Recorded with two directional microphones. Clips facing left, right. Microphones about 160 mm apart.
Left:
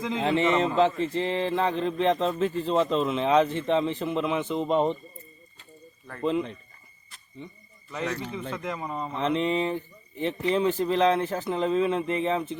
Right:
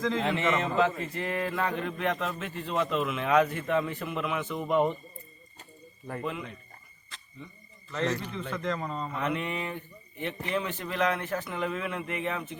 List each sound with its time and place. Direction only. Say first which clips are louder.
0.0 s speech: left 3 dB; 25° left (ahead or behind)
6.2 s speech: left 11 dB; 30° left (ahead or behind)
7.1 s a sound: right 4 dB; 90° right
8.2 s a man's voice: left 1 dB; 10° left (ahead or behind)
9.0 s speech: left 8 dB; 25° left (ahead or behind)